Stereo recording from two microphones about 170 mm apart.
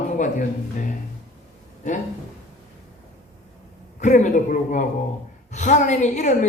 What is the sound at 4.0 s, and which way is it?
A woman's voice, 45° left (ahead or behind).